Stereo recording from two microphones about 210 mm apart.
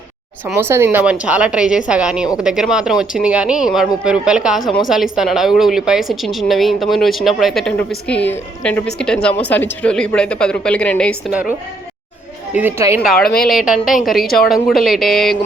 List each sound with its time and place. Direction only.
0.4 s speech: 10° right (ahead or behind); by 11.2 s 5° left (ahead or behind)
11.3 s a woman's voice: 5° right (ahead or behind)
12.5 s a woman's voice: 10° right (ahead or behind)
13.1 s speech: centre (ahead or behind)